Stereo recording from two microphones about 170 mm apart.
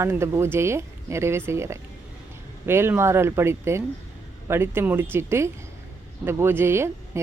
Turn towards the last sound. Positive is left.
turn(degrees=-15)  # may be behind; listen again after turning